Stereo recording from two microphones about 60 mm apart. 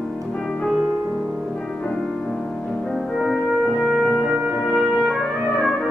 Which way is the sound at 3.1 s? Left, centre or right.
Centre.